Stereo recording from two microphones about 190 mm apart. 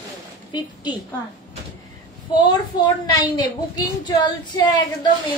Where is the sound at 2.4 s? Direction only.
20° left (ahead or behind).